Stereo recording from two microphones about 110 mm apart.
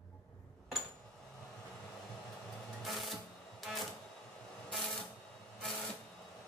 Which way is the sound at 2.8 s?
Centre (ahead or behind).